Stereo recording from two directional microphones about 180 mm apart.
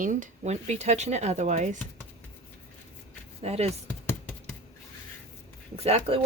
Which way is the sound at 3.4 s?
35° right (ahead or behind).